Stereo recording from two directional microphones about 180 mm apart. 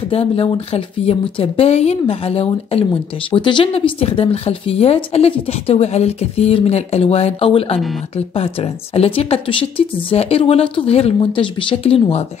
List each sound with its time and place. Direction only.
0.1 s speech: 35° left (ahead or behind)